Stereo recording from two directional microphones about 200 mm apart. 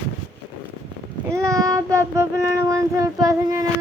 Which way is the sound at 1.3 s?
15° right (ahead or behind).